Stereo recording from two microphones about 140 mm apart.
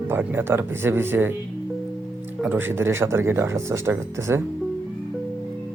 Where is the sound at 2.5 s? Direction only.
15° right (ahead or behind).